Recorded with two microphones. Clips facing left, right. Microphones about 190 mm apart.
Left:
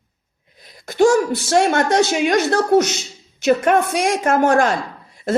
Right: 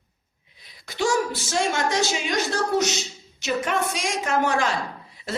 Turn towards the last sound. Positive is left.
turn(degrees=50)  # may be behind; listen again after turning